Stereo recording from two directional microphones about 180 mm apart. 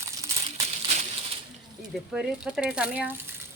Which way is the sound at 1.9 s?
5° right (ahead or behind).